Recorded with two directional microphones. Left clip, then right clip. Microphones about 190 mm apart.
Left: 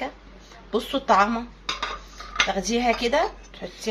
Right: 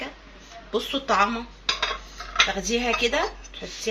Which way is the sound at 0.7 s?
15° left (ahead or behind).